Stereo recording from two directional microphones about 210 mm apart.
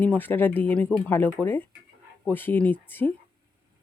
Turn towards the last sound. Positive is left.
turn(degrees=10)  # may be behind; listen again after turning